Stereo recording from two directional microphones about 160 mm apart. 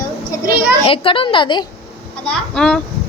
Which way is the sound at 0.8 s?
35° left (ahead or behind).